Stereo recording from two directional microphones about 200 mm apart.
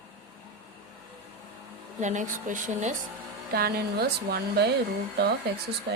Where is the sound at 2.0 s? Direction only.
40° right (ahead or behind).